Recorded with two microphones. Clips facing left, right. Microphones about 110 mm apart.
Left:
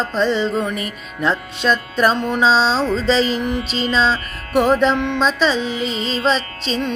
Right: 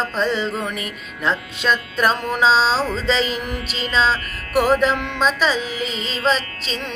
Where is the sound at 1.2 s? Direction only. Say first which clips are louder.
Left 3 dB; centre (ahead or behind).